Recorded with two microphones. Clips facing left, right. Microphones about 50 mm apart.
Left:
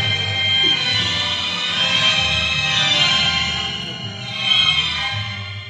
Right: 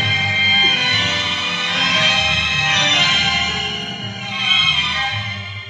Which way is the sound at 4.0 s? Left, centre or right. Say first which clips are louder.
Right 3 dB; right.